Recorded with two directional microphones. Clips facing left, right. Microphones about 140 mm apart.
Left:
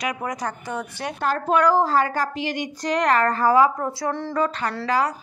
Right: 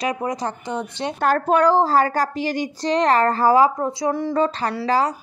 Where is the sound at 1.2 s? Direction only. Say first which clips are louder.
Right 4 dB; 55° right (ahead or behind).